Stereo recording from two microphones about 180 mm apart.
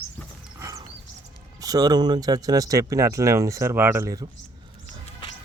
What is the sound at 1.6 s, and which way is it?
Speech, 20° right (ahead or behind).